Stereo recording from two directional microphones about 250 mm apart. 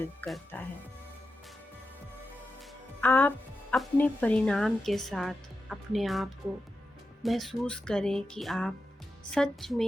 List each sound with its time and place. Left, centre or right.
0.2 s speech: centre
2.6 s speech: centre